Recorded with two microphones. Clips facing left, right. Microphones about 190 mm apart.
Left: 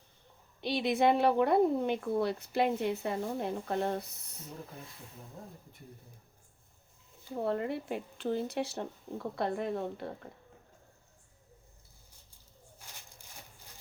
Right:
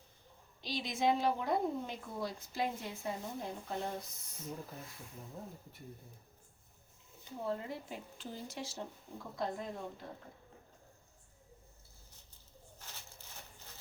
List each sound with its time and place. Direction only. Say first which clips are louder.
0.6 s a woman's voice: left 7 dB; 60° left (ahead or behind)
5.4 s speech: right 1 dB; centre (ahead or behind)
7.3 s a woman's voice: left 7 dB; 65° left (ahead or behind)
12.8 s a sound: even; 15° left (ahead or behind)